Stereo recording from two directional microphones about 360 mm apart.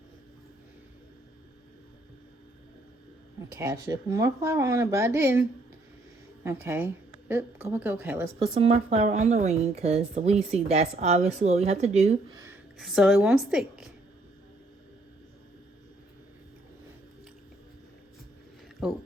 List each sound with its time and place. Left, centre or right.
3.5 s a woman's voice: centre
12.5 s a woman's voice: centre
18.8 s speech: centre